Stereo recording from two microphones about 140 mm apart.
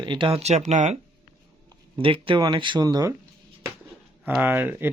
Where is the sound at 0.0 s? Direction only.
35° right (ahead or behind); by 0.9 s 55° right (ahead or behind).